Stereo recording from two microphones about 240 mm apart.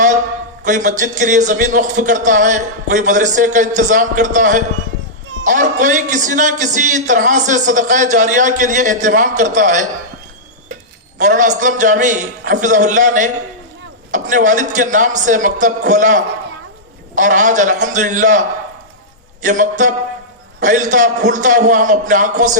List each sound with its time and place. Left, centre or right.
0.6 s a man's voice: right
11.2 s a man's voice: right